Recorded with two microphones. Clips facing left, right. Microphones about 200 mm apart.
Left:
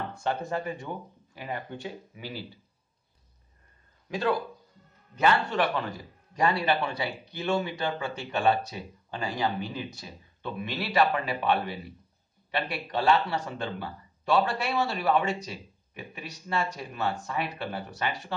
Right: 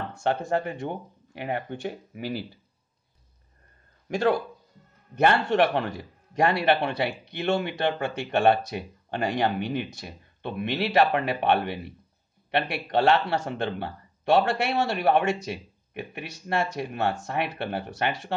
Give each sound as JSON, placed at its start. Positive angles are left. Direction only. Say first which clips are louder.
{"t": 0.4, "sound": "speech", "louder": "right 5 dB", "side_deg": -75}
{"t": 2.1, "sound": "speech", "louder": "right 7 dB", "side_deg": -45}
{"t": 4.1, "sound": "a man's voice", "louder": "right 4 dB", "side_deg": -75}